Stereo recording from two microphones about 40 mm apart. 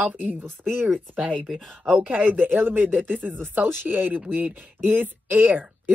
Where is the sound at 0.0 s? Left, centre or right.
Right.